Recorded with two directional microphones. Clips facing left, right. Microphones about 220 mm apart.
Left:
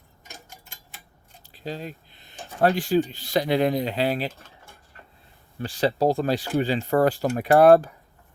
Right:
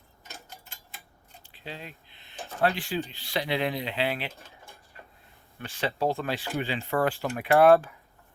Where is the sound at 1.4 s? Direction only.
40° left (ahead or behind).